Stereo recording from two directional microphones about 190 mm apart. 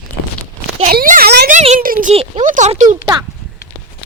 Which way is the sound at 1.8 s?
50° right (ahead or behind).